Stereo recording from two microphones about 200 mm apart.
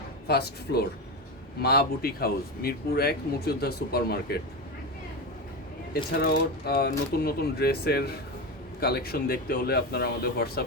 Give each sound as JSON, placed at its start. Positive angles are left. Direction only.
{"t": 0.3, "sound": "speech", "side_deg": 55}
{"t": 5.9, "sound": "speech", "side_deg": 50}